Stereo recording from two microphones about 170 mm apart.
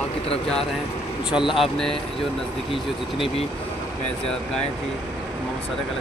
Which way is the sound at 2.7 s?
30° left (ahead or behind).